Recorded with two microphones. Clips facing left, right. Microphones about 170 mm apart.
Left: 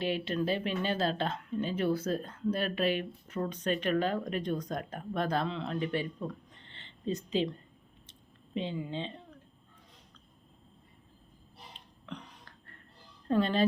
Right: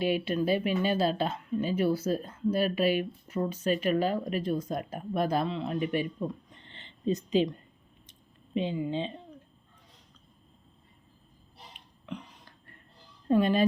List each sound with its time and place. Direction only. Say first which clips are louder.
0.0 s speech: right 4 dB; 10° right (ahead or behind)
8.5 s speech: right 5 dB; 15° right (ahead or behind)
13.2 s speech: right 3 dB; 10° right (ahead or behind)